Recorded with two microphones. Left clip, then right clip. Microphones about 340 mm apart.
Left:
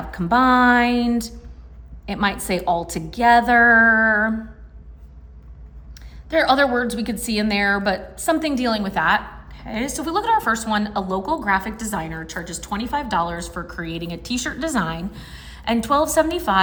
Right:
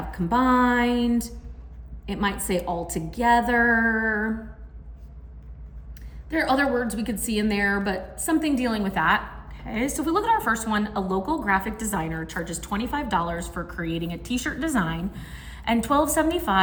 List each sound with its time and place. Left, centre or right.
0.1 s speech: centre
6.2 s a woman's voice: centre